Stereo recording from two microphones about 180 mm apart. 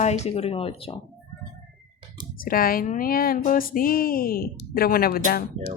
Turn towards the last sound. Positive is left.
turn(degrees=55)  # may be behind; listen again after turning